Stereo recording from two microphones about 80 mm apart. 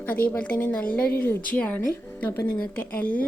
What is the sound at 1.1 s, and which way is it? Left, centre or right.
Speech, left.